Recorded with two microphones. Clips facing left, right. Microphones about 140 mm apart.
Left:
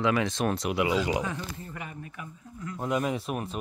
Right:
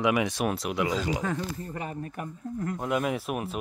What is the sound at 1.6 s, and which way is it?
Speech, 35° right (ahead or behind).